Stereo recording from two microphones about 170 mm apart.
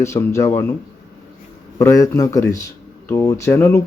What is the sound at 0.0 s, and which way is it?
Speech, 15° left (ahead or behind).